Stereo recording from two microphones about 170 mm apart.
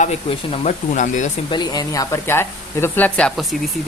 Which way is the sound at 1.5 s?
25° left (ahead or behind).